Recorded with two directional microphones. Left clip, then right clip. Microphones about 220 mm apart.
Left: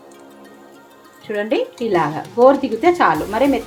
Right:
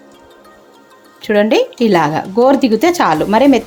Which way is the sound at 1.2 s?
50° right (ahead or behind).